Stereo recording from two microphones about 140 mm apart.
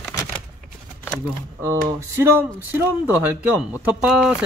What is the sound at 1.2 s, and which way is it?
Speech, 20° right (ahead or behind).